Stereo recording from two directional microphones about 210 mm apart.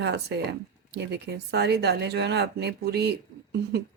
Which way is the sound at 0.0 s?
55° right (ahead or behind).